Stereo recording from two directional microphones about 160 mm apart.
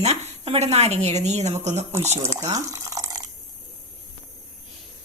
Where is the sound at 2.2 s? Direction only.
20° right (ahead or behind).